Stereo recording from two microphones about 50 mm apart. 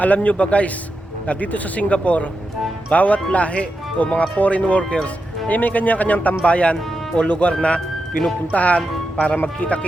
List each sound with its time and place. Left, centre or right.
0.0 s speech: left